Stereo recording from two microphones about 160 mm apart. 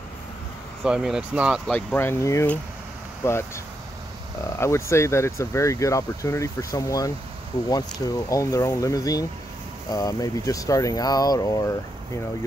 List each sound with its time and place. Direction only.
0.8 s speech: 5° right (ahead or behind)
1.7 s speech: 10° left (ahead or behind)
4.5 s speech: 15° left (ahead or behind)